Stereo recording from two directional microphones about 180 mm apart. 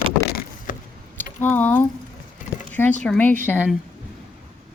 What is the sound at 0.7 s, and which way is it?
Vehicle, 50° left (ahead or behind).